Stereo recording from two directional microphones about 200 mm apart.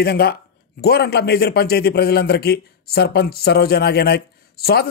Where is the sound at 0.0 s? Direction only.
50° left (ahead or behind).